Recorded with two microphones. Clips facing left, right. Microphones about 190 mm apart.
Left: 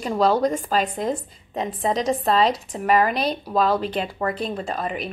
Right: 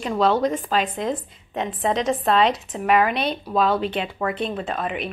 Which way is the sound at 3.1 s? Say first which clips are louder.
Left 1 dB; 40° left (ahead or behind).